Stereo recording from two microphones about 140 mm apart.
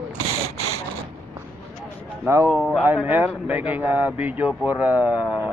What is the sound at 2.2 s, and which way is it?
Speech, 20° right (ahead or behind).